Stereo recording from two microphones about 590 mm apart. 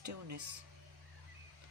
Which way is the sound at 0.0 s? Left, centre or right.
Right.